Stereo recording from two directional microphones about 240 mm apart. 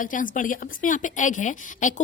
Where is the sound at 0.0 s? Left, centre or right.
Left.